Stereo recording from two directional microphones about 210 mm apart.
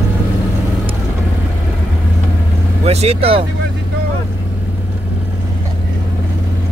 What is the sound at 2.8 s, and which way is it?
Speech, 30° right (ahead or behind).